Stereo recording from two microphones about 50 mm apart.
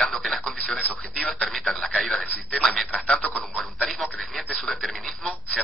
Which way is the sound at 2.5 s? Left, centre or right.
Centre.